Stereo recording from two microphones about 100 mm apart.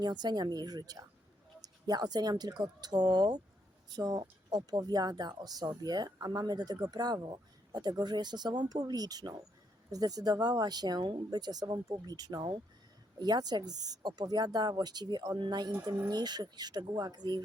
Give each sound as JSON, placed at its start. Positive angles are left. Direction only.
{"t": 0.0, "sound": "speech", "side_deg": -45}